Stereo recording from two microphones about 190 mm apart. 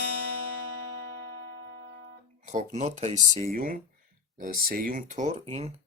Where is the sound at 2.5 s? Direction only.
40° right (ahead or behind).